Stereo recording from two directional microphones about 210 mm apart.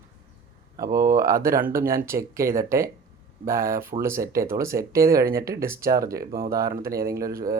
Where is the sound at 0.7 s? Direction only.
15° right (ahead or behind).